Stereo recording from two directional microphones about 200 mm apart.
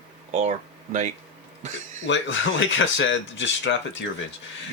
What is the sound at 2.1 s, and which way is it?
Speech, 70° left (ahead or behind).